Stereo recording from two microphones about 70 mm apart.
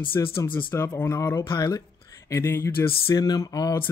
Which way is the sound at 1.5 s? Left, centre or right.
Left.